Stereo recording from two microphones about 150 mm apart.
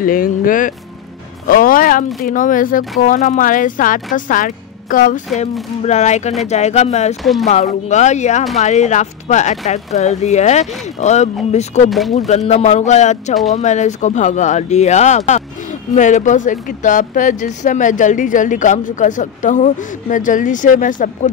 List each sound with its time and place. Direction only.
0.0 s speech: 70° left (ahead or behind)
5.4 s speech: 50° left (ahead or behind)